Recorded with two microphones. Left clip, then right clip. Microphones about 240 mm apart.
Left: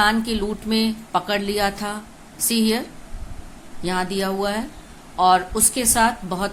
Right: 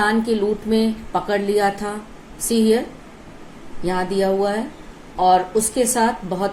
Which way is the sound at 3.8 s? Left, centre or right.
Centre.